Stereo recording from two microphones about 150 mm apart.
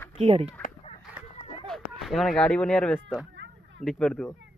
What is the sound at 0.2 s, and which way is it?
Speech, 40° right (ahead or behind).